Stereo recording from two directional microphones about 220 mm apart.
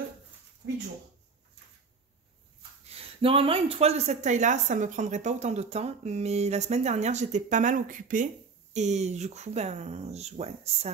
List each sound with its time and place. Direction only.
2.9 s speech: 25° right (ahead or behind)